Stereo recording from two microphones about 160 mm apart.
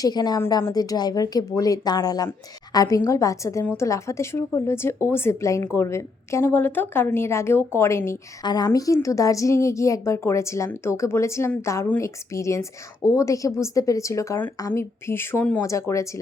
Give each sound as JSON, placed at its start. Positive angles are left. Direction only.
{"t": 0.0, "sound": "a woman's voice", "side_deg": 25}